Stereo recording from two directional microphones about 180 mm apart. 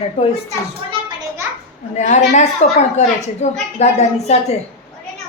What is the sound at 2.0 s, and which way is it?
A woman's voice, 40° left (ahead or behind).